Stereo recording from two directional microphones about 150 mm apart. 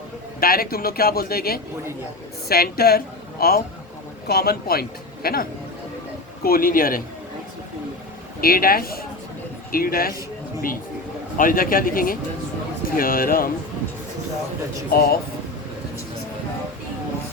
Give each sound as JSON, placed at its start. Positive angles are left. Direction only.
{"t": 0.3, "sound": "a man's voice", "side_deg": 75}
{"t": 6.4, "sound": "speech", "side_deg": 75}
{"t": 8.4, "sound": "a man's voice", "side_deg": 75}
{"t": 11.3, "sound": "speech", "side_deg": 70}
{"t": 14.8, "sound": "speech", "side_deg": 90}